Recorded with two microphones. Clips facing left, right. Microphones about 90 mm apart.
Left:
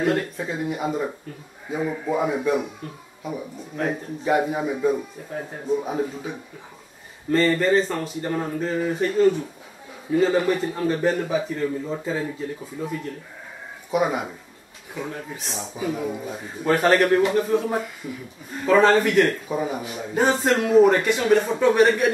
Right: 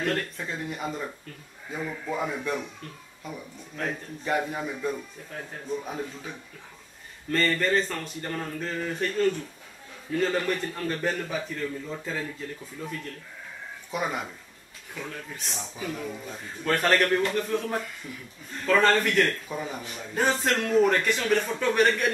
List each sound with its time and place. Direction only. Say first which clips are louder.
0.0 s a man's voice: left 6 dB; 10° left (ahead or behind)
15.3 s a man's voice: left 5 dB; centre (ahead or behind)